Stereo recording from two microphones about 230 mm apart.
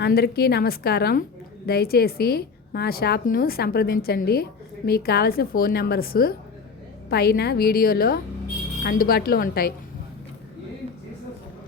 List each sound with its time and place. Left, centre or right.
0.0 s a woman's voice: left